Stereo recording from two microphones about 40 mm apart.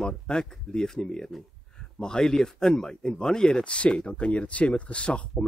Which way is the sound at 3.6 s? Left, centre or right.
Left.